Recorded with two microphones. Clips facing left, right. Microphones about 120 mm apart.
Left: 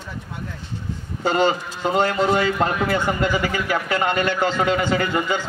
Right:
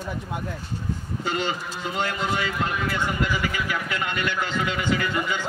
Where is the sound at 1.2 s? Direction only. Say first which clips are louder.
Left 9 dB; 40° left (ahead or behind).